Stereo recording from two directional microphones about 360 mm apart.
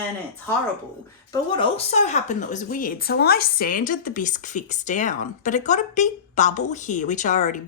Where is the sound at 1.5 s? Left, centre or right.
Centre.